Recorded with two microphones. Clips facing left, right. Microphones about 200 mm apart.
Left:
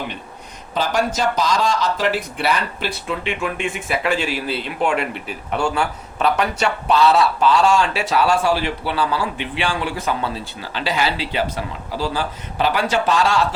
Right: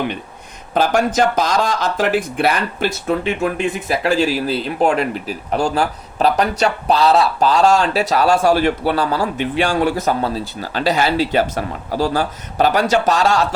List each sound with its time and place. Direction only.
0.7 s speech: 55° right (ahead or behind)